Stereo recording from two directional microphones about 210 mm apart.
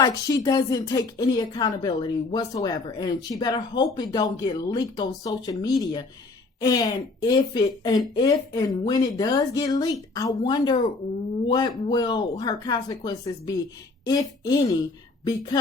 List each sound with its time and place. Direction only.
0.0 s a woman's voice: 15° left (ahead or behind)